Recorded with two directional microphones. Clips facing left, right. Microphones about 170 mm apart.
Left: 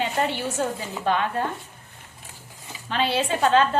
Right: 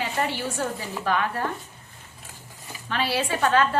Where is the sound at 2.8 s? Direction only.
20° left (ahead or behind).